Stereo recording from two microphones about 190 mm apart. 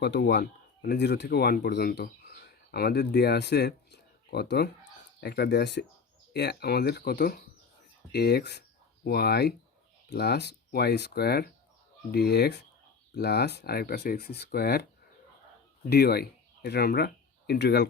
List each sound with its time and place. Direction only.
0.0 s speech: 65° left (ahead or behind)
15.9 s speech: 55° left (ahead or behind)